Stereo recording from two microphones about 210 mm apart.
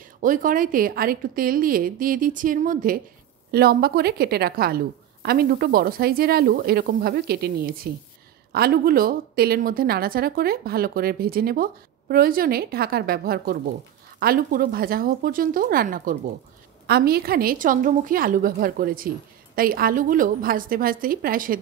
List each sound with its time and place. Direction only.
0.2 s a woman's voice: 40° right (ahead or behind)